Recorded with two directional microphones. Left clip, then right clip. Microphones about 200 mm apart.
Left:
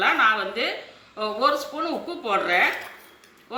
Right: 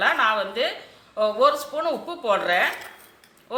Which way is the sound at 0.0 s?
45° right (ahead or behind).